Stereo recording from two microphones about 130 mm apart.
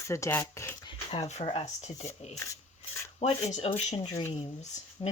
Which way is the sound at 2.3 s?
25° left (ahead or behind).